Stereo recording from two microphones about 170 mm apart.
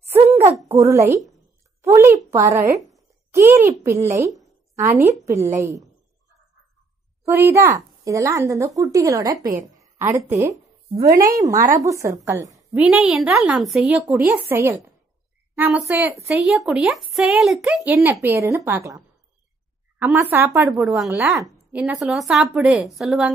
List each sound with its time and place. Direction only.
0.7 s a woman's voice: 20° right (ahead or behind)
4.8 s a woman's voice: 45° right (ahead or behind)
5.2 s a woman's voice: 20° right (ahead or behind)
7.2 s a woman's voice: 15° right (ahead or behind)
12.7 s a woman's voice: 5° right (ahead or behind)
18.2 s a woman's voice: 15° right (ahead or behind); by 23.3 s centre (ahead or behind)